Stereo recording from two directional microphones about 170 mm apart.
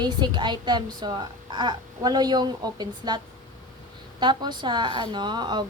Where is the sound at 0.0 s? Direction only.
25° right (ahead or behind).